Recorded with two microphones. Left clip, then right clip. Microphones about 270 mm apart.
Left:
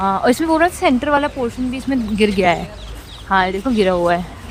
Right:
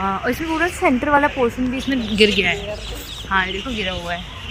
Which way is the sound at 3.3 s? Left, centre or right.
Centre.